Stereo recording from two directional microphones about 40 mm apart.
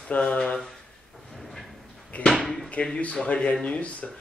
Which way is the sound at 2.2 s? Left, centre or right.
Left.